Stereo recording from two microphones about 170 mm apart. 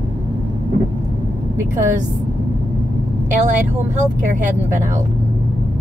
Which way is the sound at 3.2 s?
45° right (ahead or behind).